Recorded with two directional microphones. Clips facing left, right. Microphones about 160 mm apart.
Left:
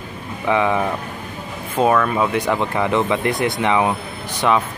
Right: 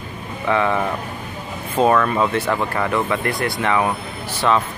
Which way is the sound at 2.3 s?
15° left (ahead or behind).